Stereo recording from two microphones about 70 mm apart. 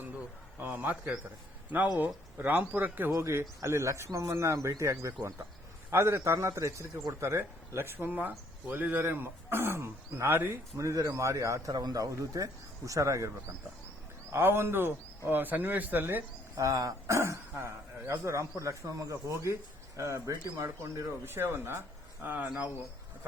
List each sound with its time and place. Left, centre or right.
0.6 s speech: right
2.0 s speech: right
3.2 s speech: right
10.8 s speech: right
11.7 s speech: right
14.3 s speech: right
16.6 s speech: right
21.2 s speech: right
22.4 s speech: centre